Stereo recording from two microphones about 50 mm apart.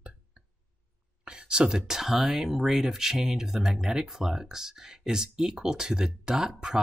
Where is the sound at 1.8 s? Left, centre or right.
Centre.